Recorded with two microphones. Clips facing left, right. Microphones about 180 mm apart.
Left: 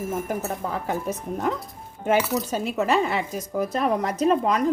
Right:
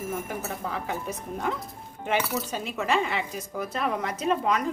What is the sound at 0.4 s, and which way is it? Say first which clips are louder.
Speech: left 4 dB; 40° left (ahead or behind).